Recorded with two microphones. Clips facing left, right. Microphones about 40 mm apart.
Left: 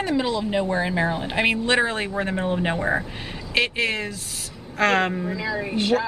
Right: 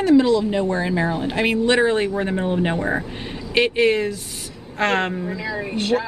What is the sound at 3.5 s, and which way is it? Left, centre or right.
Speech, centre.